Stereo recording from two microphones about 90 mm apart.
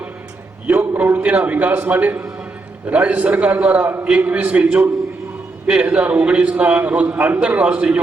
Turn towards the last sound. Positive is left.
turn(degrees=-15)  # may be behind; listen again after turning